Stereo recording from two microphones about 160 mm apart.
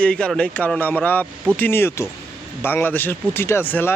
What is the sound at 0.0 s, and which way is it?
Speech, 5° left (ahead or behind).